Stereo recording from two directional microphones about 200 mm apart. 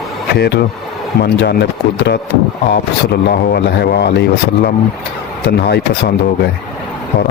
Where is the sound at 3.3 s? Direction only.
50° left (ahead or behind).